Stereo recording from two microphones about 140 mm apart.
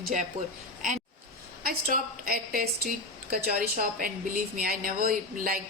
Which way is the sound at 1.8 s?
90° right.